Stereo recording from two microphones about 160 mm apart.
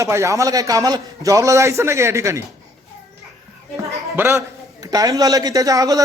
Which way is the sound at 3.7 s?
20° right (ahead or behind).